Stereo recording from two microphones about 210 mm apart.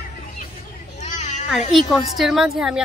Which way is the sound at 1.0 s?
35° left (ahead or behind).